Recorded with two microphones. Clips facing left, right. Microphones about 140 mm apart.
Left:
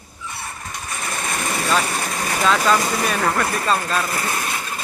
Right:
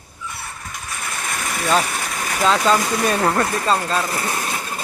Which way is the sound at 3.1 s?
25° right (ahead or behind).